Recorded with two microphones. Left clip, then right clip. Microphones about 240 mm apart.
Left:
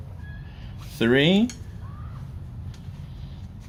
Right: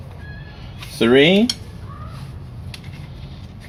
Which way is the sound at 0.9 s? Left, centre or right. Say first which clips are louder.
Right 7 dB; left.